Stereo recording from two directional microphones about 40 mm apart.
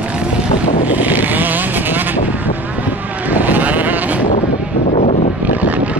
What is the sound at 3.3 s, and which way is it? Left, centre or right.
Vehicle, right.